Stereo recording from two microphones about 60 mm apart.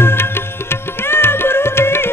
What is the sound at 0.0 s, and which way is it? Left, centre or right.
Music, left.